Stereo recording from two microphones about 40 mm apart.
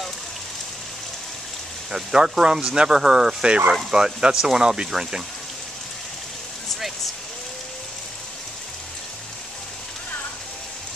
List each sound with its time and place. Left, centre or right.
1.9 s speech: centre
3.4 s speech: right
3.9 s speech: centre